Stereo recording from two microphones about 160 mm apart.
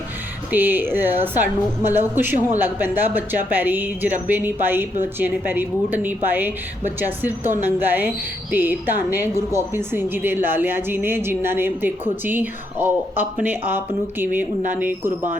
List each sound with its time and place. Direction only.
0.5 s speech: 10° right (ahead or behind)